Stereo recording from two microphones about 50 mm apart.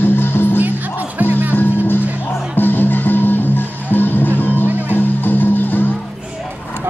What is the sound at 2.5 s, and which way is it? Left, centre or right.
Music, left.